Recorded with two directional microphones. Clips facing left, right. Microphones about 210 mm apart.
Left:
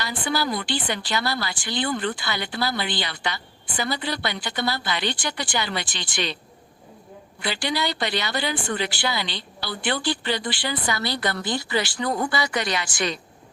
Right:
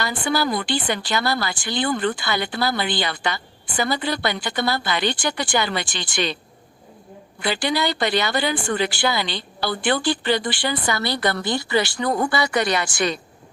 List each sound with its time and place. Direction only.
0.0 s speech: 50° right (ahead or behind)
7.4 s speech: 50° right (ahead or behind)